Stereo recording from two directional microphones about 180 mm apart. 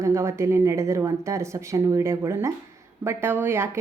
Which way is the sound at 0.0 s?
15° right (ahead or behind).